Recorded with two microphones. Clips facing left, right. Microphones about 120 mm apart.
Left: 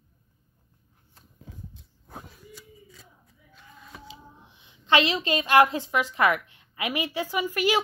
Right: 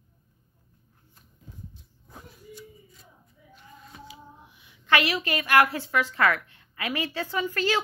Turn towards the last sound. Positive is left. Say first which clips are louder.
# left 2 dB
turn(degrees=15)  # may be behind; listen again after turning